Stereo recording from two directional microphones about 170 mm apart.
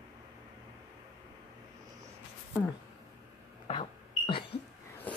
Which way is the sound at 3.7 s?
30° left (ahead or behind).